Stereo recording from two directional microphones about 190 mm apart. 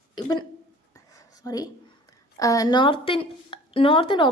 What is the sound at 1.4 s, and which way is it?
A woman's voice, 20° left (ahead or behind).